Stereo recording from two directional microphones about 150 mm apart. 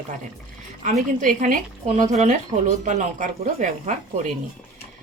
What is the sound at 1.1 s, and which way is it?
A woman's voice, 60° right (ahead or behind).